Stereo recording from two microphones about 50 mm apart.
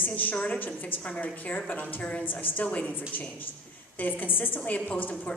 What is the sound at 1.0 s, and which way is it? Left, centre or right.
A woman's voice, left.